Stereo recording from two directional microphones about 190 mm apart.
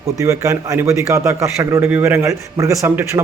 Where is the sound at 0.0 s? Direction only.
15° right (ahead or behind).